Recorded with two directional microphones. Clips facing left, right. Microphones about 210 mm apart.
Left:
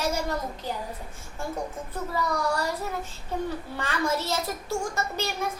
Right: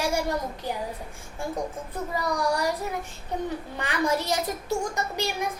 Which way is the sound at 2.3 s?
15° right (ahead or behind).